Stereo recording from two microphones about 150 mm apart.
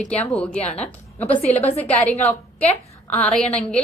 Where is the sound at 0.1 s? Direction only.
5° left (ahead or behind).